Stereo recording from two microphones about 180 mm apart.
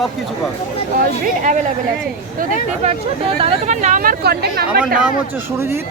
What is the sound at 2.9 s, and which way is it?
Speech, 30° right (ahead or behind).